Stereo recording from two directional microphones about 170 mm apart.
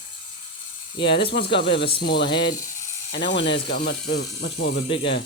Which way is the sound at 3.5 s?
75° left (ahead or behind).